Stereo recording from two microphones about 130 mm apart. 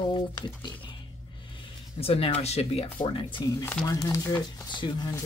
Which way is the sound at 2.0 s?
50° left (ahead or behind).